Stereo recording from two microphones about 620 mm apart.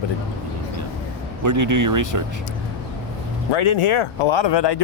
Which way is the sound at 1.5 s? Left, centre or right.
Right.